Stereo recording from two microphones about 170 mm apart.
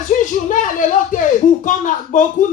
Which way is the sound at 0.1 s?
55° left (ahead or behind).